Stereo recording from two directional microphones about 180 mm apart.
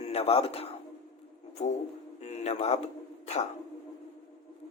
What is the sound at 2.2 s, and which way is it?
Speech, 40° left (ahead or behind).